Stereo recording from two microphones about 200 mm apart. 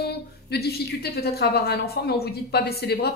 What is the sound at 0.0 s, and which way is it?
A woman's voice, 55° left (ahead or behind).